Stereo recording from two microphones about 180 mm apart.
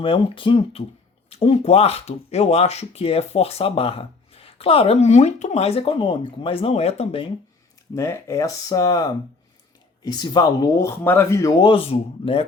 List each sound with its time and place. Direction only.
0.0 s speech: 30° left (ahead or behind)
7.9 s speech: 15° left (ahead or behind); by 12.5 s 30° left (ahead or behind)